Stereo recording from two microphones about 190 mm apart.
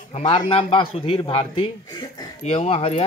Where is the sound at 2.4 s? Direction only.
35° left (ahead or behind).